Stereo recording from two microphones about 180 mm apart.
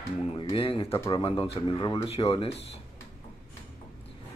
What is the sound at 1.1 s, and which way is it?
Speech, 30° left (ahead or behind).